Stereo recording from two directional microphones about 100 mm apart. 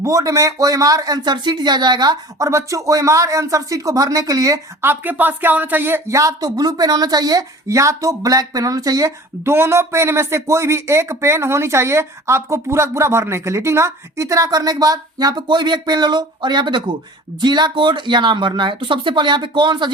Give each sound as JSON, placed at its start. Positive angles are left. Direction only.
{"t": 0.0, "sound": "speech", "side_deg": -35}
{"t": 2.5, "sound": "speech", "side_deg": -30}
{"t": 4.8, "sound": "speech", "side_deg": -20}